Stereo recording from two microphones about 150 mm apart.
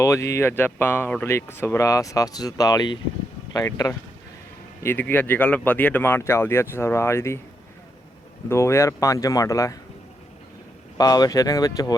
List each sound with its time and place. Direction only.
0.0 s speech: 20° left (ahead or behind)
8.4 s speech: 20° left (ahead or behind)
10.9 s speech: 25° left (ahead or behind)